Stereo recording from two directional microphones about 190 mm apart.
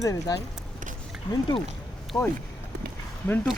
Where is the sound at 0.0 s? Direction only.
15° left (ahead or behind).